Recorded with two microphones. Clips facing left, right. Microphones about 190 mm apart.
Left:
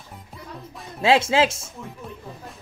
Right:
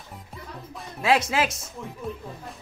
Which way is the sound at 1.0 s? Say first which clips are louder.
Left 4 dB; 25° left (ahead or behind).